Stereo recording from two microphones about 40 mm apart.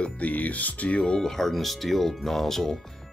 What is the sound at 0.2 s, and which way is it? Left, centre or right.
Speech, left.